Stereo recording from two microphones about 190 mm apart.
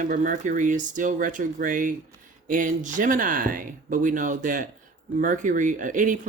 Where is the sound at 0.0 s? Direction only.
45° right (ahead or behind).